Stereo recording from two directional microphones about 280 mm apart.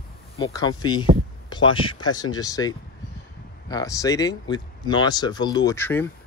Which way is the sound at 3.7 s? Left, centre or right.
Centre.